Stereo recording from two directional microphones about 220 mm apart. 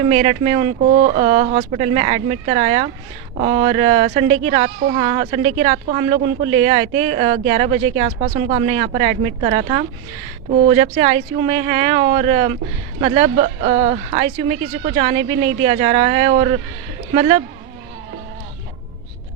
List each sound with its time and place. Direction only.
0.1 s speech: 25° right (ahead or behind)